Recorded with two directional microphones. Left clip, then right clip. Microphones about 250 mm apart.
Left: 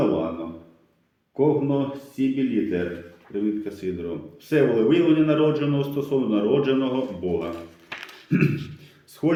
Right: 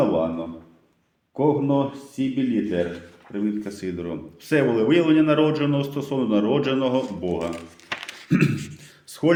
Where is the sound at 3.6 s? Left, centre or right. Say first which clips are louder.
Left 1 dB; right.